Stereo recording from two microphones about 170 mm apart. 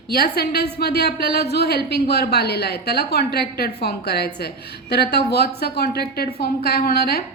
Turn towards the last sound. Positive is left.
turn(degrees=65)  # may be behind; listen again after turning